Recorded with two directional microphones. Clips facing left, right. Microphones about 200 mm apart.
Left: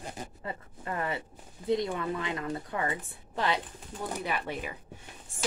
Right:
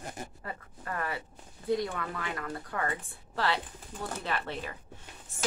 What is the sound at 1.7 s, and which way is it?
Speech, 20° left (ahead or behind).